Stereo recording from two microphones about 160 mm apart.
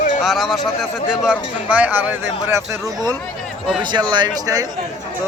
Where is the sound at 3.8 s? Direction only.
25° right (ahead or behind).